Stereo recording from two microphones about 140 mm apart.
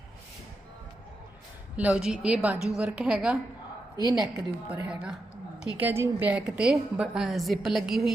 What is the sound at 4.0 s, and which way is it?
Speech, 30° right (ahead or behind).